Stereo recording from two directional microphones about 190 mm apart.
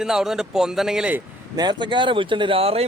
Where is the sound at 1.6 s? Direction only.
25° right (ahead or behind).